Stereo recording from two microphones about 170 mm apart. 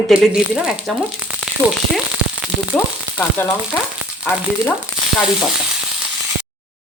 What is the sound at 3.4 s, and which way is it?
Frying, 10° left (ahead or behind).